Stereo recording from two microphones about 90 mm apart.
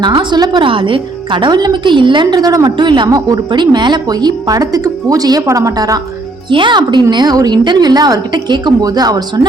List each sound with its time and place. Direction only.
0.0 s a woman's voice: 55° right (ahead or behind)
0.6 s a woman's voice: 70° right (ahead or behind); by 2.7 s 45° right (ahead or behind)
2.7 s a woman's voice: 60° right (ahead or behind)
3.1 s a woman's voice: 45° right (ahead or behind)
6.5 s a woman's voice: 60° right (ahead or behind)